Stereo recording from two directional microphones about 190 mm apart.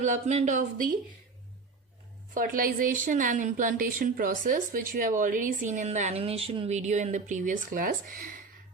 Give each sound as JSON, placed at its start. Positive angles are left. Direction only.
{"t": 0.0, "sound": "speech", "side_deg": -40}
{"t": 2.3, "sound": "a woman's voice", "side_deg": -45}